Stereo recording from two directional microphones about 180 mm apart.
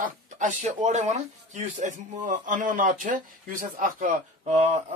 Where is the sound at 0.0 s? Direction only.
45° right (ahead or behind).